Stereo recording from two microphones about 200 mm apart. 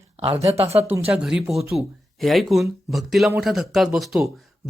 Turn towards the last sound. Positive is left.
turn(degrees=0)  # may be behind; listen again after turning